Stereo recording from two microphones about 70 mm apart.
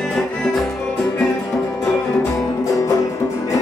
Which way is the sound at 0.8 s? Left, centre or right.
Left.